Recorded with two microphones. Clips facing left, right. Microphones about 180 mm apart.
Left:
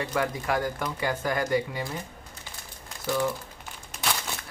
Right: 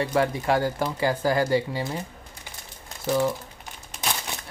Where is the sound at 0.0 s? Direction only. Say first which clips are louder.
Right 5 dB; 30° right (ahead or behind).